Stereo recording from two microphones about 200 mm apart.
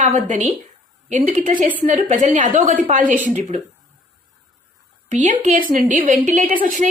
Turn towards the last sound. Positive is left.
turn(degrees=-45)  # may be behind; listen again after turning